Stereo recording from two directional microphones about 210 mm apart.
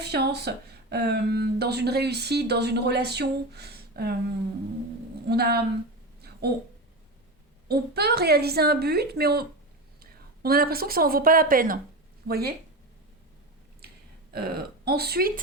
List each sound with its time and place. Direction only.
0.0 s speech: 50° right (ahead or behind)
5.3 s speech: 50° right (ahead or behind)
7.7 s speech: 50° right (ahead or behind)
14.3 s speech: 45° right (ahead or behind)